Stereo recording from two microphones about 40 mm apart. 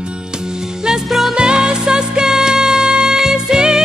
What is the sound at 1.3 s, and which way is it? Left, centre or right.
Music, centre.